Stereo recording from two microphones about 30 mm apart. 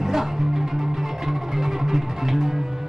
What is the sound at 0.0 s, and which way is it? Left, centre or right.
Music, centre.